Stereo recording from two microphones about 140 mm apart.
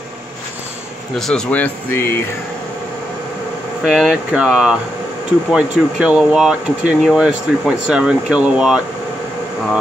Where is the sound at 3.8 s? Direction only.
5° right (ahead or behind).